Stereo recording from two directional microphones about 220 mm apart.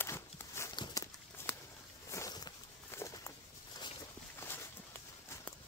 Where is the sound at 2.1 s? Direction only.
15° left (ahead or behind).